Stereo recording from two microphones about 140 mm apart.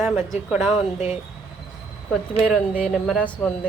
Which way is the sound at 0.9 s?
55° left (ahead or behind).